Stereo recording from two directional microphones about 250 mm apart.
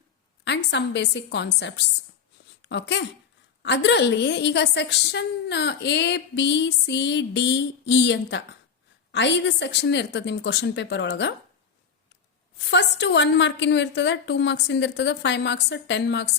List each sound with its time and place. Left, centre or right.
0.4 s a woman's voice: left
12.7 s a woman's voice: left